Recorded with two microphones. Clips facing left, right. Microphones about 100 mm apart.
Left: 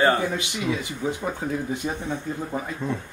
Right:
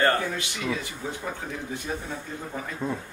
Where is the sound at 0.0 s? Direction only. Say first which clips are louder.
Left 3 dB; 15° left (ahead or behind).